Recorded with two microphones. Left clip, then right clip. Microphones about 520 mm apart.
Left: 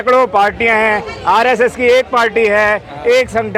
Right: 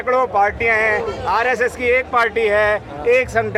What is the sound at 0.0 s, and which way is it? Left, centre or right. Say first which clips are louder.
Speech: left 5 dB; left.